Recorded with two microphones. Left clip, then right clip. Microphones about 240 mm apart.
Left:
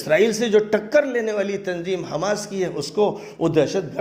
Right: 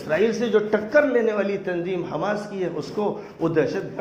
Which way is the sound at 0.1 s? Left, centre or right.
Left.